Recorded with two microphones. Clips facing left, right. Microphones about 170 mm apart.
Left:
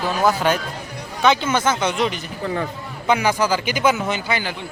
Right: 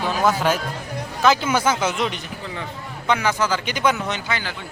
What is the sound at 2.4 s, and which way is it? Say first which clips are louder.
Speech: left 10 dB; 45° left (ahead or behind).